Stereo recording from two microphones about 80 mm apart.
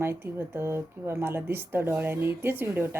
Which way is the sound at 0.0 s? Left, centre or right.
Right.